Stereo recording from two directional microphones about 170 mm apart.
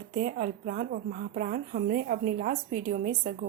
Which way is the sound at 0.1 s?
55° right (ahead or behind).